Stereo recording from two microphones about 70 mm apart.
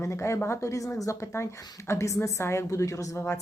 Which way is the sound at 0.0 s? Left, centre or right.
Left.